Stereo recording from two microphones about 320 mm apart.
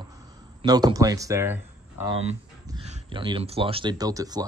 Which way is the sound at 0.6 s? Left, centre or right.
Centre.